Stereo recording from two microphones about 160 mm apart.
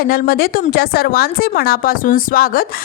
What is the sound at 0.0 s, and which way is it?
Speech, 70° left (ahead or behind).